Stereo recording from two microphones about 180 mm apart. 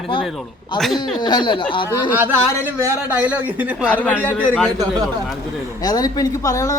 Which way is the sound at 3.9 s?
10° left (ahead or behind).